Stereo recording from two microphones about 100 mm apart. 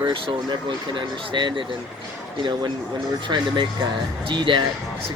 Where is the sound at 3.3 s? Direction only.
45° right (ahead or behind).